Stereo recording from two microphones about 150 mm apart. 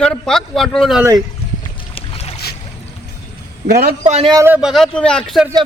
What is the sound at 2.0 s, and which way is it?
Boat, 40° left (ahead or behind).